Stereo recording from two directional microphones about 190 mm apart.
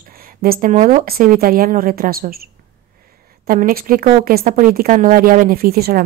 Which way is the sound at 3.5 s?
50° right (ahead or behind).